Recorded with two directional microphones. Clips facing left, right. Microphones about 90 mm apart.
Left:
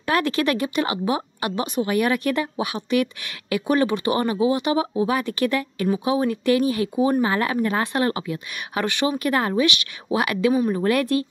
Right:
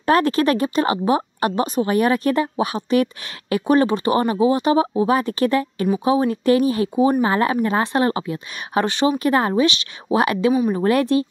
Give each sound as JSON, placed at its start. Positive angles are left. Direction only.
{"t": 0.0, "sound": "speech", "side_deg": -35}
{"t": 10.5, "sound": "speech", "side_deg": -10}
{"t": 10.8, "sound": "speech", "side_deg": -25}